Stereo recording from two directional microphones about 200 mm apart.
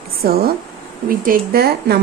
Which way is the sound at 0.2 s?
50° right (ahead or behind).